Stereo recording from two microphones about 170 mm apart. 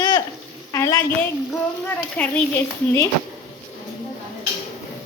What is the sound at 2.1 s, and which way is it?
Speech, 10° left (ahead or behind).